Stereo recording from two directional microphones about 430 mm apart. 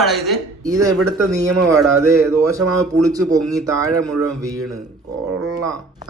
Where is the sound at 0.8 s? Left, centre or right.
Right.